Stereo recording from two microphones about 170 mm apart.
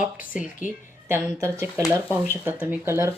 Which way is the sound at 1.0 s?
15° right (ahead or behind).